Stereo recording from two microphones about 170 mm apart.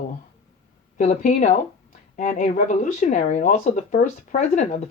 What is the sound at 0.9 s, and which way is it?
Speech, 45° left (ahead or behind).